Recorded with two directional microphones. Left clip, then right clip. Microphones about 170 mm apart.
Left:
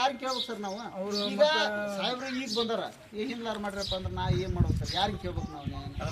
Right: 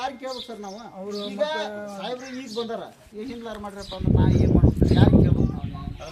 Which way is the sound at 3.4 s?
25° left (ahead or behind).